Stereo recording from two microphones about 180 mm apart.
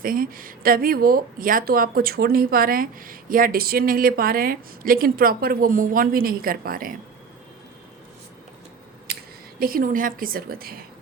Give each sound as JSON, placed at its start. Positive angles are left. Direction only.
{"t": 0.0, "sound": "speech", "side_deg": -50}
{"t": 9.1, "sound": "a sound", "side_deg": -60}
{"t": 9.6, "sound": "speech", "side_deg": -55}